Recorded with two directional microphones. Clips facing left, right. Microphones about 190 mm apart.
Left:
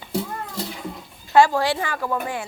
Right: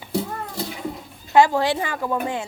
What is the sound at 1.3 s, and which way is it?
A woman's voice, 20° right (ahead or behind).